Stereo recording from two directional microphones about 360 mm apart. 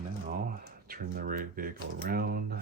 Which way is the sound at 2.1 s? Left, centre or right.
Right.